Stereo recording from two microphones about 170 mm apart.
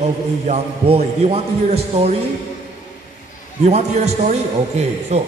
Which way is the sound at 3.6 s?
40° right (ahead or behind).